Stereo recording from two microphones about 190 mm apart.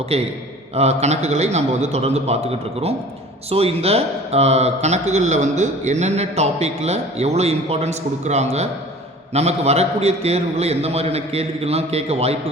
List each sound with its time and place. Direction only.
0.1 s speech: 30° right (ahead or behind)